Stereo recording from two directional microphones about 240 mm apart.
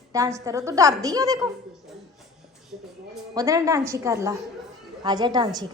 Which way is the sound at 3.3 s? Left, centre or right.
Centre.